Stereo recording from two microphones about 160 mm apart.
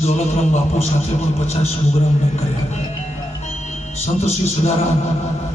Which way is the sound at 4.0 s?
40° left (ahead or behind).